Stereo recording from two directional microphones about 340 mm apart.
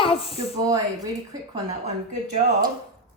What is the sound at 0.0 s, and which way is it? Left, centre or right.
Speech, centre.